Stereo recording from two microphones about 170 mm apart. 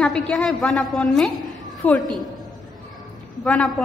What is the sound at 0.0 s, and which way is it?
A woman's voice, 5° left (ahead or behind).